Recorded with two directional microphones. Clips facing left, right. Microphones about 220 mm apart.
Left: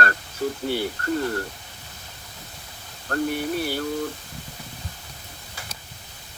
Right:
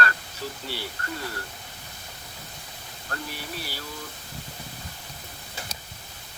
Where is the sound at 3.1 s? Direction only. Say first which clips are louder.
Left 12 dB; 55° left (ahead or behind).